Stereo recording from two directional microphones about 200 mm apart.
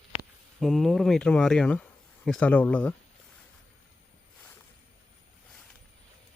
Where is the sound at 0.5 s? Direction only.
Centre (ahead or behind).